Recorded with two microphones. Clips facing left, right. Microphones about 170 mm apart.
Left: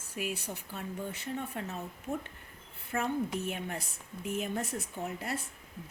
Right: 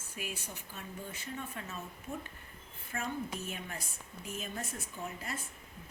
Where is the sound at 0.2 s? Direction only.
65° left (ahead or behind).